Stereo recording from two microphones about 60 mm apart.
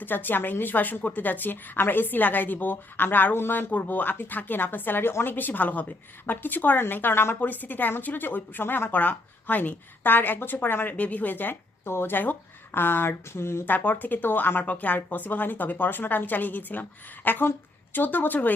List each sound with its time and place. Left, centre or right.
0.0 s a woman's voice: left
7.3 s a woman's voice: left
13.7 s a woman's voice: left